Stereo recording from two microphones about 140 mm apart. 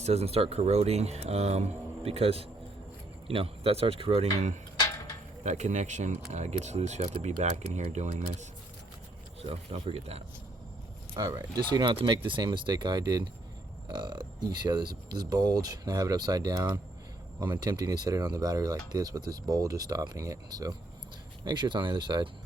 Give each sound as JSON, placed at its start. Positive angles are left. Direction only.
{"t": 0.0, "sound": "speech", "side_deg": -45}
{"t": 9.4, "sound": "speech", "side_deg": -40}
{"t": 11.1, "sound": "speech", "side_deg": -25}